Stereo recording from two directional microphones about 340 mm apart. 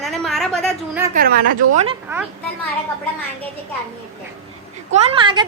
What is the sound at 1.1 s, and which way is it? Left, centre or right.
Speech, right.